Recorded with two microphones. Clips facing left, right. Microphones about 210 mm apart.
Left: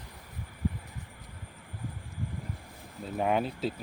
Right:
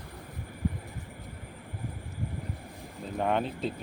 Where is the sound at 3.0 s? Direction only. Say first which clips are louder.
Even; 5° left (ahead or behind).